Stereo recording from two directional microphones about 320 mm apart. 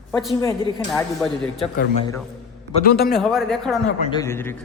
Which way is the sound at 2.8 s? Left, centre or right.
Left.